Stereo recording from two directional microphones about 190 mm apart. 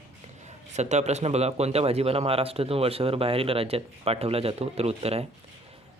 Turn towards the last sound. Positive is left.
turn(degrees=-35)  # may be behind; listen again after turning